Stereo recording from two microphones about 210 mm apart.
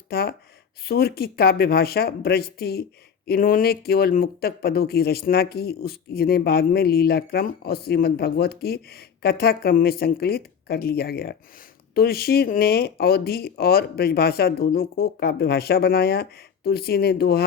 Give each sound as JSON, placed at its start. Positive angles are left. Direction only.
{"t": 0.1, "sound": "speech", "side_deg": 45}